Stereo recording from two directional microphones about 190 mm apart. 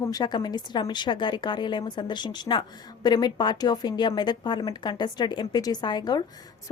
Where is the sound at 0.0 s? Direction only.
20° left (ahead or behind).